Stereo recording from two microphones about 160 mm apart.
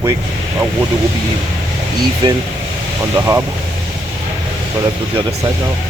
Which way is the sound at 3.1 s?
20° right (ahead or behind).